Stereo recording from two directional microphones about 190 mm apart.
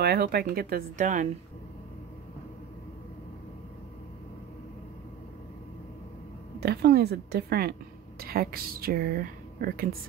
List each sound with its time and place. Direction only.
0.0 s speech: 55° right (ahead or behind)
6.6 s a woman's voice: 55° right (ahead or behind)